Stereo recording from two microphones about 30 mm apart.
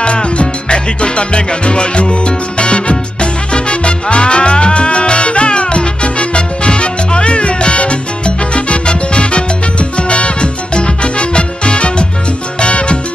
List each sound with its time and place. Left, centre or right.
0.0 s music: left